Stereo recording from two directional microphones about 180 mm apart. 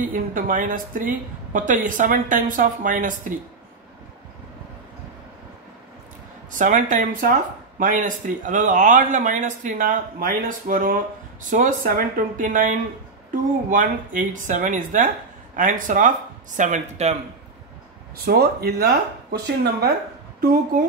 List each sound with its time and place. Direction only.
0.1 s a woman's voice: 45° right (ahead or behind)
6.5 s a woman's voice: 45° right (ahead or behind)
18.1 s a woman's voice: 60° right (ahead or behind)